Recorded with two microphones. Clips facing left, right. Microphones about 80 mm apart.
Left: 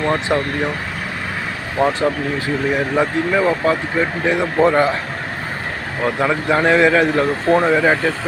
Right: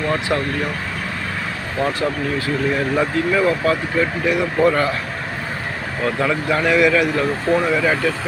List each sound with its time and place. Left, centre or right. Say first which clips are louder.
0.0 s speech: left 2 dB; left
1.8 s speech: left 4 dB; left
6.0 s speech: left 2 dB; left